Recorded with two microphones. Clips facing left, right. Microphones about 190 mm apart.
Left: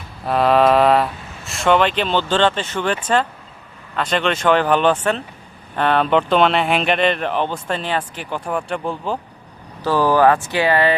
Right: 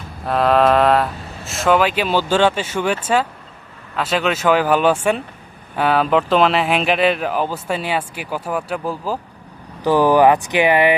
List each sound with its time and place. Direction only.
0.3 s speech: centre (ahead or behind)
9.8 s speech: 15° right (ahead or behind)